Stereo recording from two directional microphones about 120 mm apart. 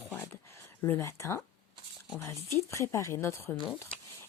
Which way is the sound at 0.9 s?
20° left (ahead or behind).